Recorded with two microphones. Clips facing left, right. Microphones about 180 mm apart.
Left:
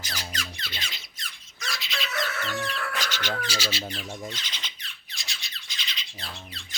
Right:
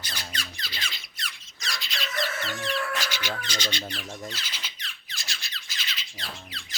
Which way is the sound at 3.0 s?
10° right (ahead or behind).